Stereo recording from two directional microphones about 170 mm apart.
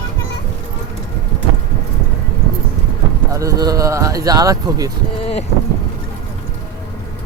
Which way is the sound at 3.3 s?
20° right (ahead or behind).